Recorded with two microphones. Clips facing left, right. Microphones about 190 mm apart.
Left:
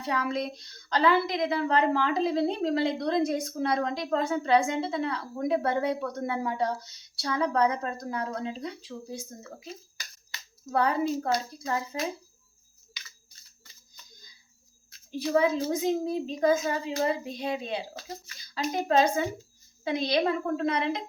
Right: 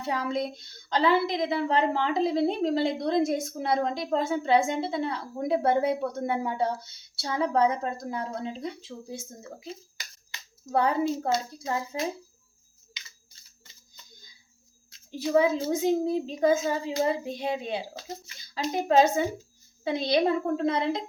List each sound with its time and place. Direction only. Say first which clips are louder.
0.0 s a woman's voice: right 1 dB; 25° right (ahead or behind)
10.7 s a woman's voice: right 1 dB; 25° right (ahead or behind)
14.9 s a woman's voice: right 2 dB; 25° right (ahead or behind)